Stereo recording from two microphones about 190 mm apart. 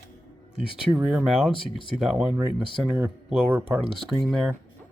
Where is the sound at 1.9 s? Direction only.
5° right (ahead or behind).